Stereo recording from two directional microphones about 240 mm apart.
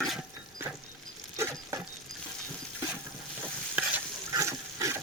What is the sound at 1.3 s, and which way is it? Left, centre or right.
Patter, centre.